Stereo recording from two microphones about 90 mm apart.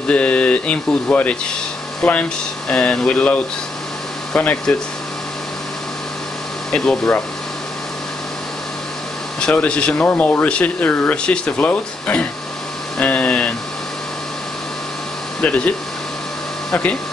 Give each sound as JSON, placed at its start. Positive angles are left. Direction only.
{"t": 0.1, "sound": "speech", "side_deg": 15}
{"t": 6.7, "sound": "speech", "side_deg": 10}
{"t": 9.4, "sound": "speech", "side_deg": 10}
{"t": 13.0, "sound": "a sound", "side_deg": 15}
{"t": 15.4, "sound": "speech", "side_deg": 15}